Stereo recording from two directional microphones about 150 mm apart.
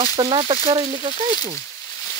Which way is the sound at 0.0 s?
40° right (ahead or behind).